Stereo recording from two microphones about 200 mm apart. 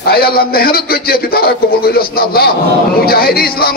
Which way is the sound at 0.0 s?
50° left (ahead or behind).